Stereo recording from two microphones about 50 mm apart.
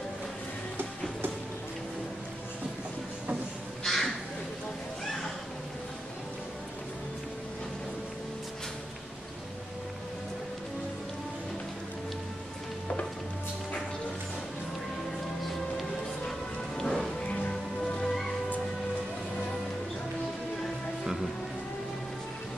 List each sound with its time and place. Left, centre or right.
3.8 s crow: centre
15.4 s music: centre
17.3 s music: centre
21.0 s music: centre